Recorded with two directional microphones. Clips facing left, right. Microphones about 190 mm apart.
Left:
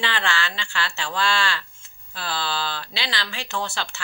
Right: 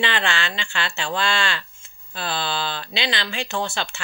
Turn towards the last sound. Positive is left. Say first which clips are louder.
# right 3 dB
turn(degrees=-20)  # may be behind; listen again after turning